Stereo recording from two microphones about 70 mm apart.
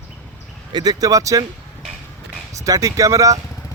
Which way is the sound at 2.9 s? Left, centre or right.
Right.